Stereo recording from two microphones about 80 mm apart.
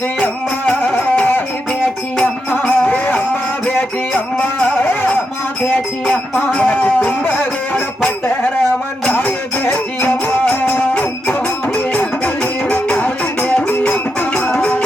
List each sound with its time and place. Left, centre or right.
0.7 s music: left
6.5 s music: centre
9.1 s music: left